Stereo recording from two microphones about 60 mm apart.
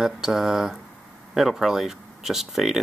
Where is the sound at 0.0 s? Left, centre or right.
Centre.